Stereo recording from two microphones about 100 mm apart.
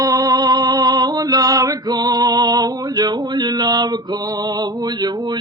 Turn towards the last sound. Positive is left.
turn(degrees=-45)  # may be behind; listen again after turning